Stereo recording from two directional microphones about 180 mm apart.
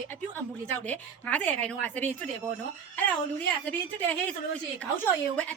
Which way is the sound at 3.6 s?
10° left (ahead or behind).